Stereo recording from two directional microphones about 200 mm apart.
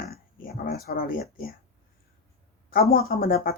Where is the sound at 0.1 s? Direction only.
50° left (ahead or behind).